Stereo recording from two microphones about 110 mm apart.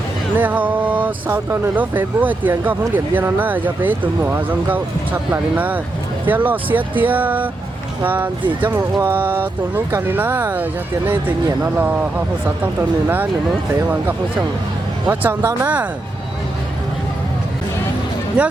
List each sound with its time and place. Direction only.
0.3 s speech: 15° right (ahead or behind)
15.0 s speech: 15° right (ahead or behind)
18.4 s speech: 10° right (ahead or behind)